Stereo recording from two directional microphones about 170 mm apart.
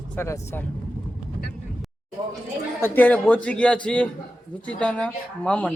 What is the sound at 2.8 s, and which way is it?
Speech, 10° left (ahead or behind).